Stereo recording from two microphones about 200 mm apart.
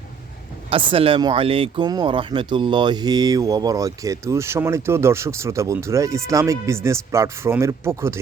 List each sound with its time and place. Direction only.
0.7 s speech: 25° right (ahead or behind)